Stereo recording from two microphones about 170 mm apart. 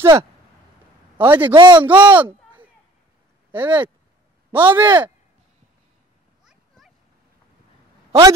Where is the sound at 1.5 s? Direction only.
25° right (ahead or behind).